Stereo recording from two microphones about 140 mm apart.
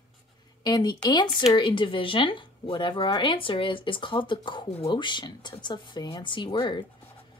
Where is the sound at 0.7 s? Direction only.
30° left (ahead or behind).